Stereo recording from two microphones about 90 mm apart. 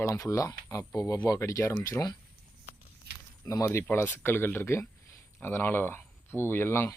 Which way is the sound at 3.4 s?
35° left (ahead or behind).